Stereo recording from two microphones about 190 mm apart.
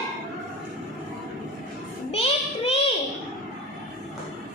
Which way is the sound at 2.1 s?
30° left (ahead or behind).